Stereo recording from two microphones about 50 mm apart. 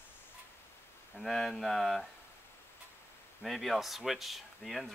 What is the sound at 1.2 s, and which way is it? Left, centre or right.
Speech, centre.